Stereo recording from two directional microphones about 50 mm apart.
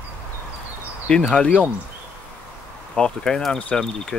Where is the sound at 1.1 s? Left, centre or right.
Left.